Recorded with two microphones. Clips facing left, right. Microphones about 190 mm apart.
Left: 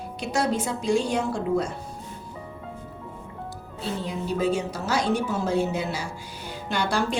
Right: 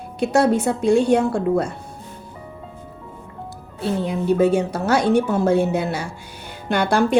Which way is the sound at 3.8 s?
60° right (ahead or behind).